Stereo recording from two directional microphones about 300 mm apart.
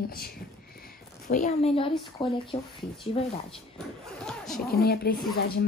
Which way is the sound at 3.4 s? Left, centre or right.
Centre.